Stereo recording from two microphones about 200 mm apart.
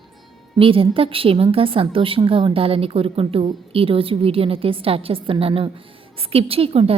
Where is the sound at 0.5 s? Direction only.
25° right (ahead or behind).